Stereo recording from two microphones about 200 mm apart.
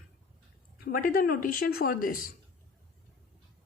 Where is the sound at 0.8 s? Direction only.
45° left (ahead or behind).